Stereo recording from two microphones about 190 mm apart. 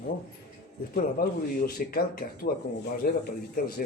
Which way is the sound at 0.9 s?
50° left (ahead or behind).